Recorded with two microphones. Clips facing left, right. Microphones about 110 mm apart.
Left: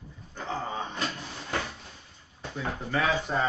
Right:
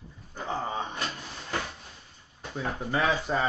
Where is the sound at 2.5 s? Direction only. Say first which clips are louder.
Right 1 dB; 15° right (ahead or behind).